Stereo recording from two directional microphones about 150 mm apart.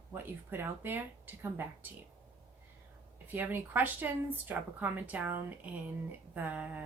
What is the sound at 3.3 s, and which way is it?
Speech, 10° right (ahead or behind).